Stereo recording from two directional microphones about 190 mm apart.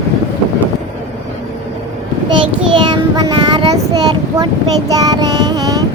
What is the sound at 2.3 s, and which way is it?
Child singing, 25° right (ahead or behind).